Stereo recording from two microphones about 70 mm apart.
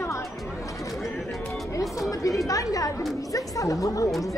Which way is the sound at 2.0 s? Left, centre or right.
Left.